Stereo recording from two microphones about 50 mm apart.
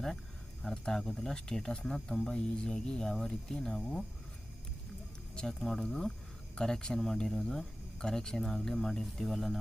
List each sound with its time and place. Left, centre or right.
0.7 s speech: centre
5.3 s speech: centre